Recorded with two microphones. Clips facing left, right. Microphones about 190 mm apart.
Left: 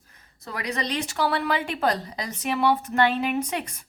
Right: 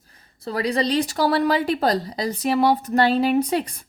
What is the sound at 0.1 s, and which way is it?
A woman's voice, 30° right (ahead or behind).